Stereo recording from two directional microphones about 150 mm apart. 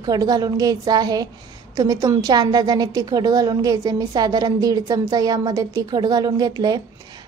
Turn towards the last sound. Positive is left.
turn(degrees=-25)  # may be behind; listen again after turning